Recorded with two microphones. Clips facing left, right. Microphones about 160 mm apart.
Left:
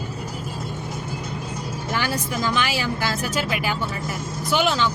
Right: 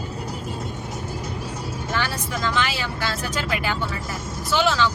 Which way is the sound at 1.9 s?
10° left (ahead or behind).